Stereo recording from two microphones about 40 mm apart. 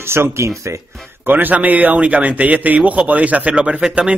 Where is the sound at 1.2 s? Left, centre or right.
Right.